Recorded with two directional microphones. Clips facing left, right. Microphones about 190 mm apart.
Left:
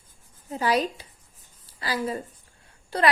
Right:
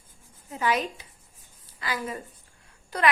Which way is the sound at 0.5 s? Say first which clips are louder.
Left 3 dB; 35° left (ahead or behind).